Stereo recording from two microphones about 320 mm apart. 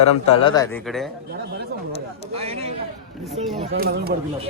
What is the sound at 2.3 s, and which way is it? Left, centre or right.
Speech, centre.